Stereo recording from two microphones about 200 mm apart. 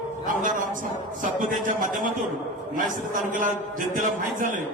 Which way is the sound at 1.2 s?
40° right (ahead or behind).